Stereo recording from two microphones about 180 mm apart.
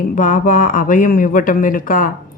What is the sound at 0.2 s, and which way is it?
Speech, 45° left (ahead or behind).